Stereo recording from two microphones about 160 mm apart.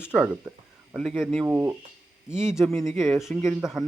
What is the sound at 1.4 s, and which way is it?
Speech, 15° right (ahead or behind).